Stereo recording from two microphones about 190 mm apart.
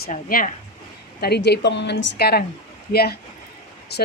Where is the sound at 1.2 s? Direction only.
60° left (ahead or behind).